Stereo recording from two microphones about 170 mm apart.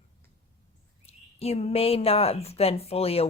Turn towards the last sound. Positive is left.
turn(degrees=35)  # may be behind; listen again after turning